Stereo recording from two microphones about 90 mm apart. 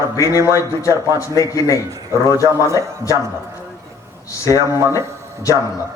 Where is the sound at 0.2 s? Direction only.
35° left (ahead or behind).